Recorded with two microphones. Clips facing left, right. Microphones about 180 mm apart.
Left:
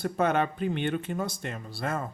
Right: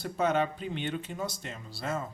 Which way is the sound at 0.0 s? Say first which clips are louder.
Left 2 dB; 55° left (ahead or behind).